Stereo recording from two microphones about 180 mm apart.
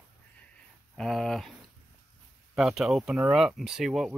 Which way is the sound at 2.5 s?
5° right (ahead or behind).